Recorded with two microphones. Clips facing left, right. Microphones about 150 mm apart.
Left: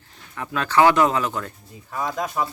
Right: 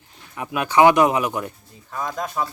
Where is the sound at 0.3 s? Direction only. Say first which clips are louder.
Right 2 dB; 15° right (ahead or behind).